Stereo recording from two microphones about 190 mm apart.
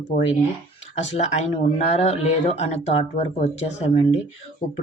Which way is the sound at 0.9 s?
35° left (ahead or behind).